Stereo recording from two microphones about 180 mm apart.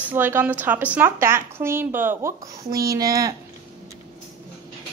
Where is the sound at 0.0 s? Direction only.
10° right (ahead or behind).